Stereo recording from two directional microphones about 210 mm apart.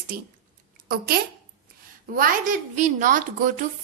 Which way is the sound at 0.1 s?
45° right (ahead or behind).